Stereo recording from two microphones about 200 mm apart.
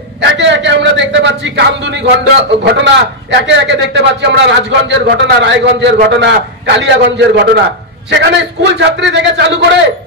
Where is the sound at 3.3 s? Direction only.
60° right (ahead or behind).